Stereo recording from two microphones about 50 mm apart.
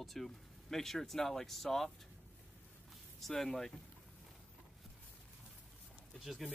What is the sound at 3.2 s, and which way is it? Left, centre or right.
Speech, centre.